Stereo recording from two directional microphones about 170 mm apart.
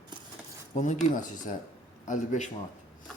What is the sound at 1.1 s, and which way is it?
Speech, 50° left (ahead or behind).